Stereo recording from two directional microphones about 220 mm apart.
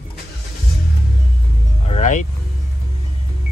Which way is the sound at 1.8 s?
30° left (ahead or behind).